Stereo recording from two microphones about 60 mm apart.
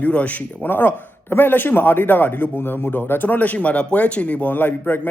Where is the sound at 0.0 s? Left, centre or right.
Left.